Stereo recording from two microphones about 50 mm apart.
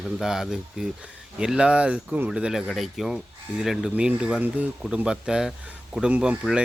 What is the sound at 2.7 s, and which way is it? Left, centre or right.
Speech, centre.